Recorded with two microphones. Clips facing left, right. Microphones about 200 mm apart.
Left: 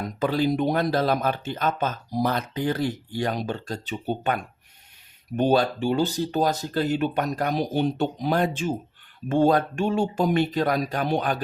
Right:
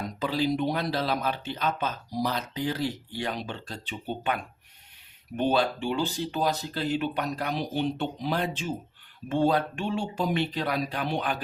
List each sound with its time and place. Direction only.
0.2 s speech: 50° left (ahead or behind)
5.4 s speech: 40° left (ahead or behind)